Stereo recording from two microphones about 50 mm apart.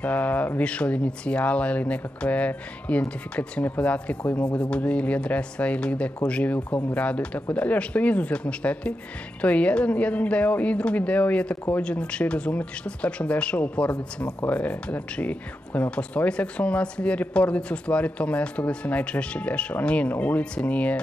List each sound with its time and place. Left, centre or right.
0.0 s speech: left